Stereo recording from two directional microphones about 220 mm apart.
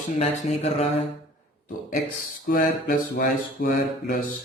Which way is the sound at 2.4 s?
40° left (ahead or behind).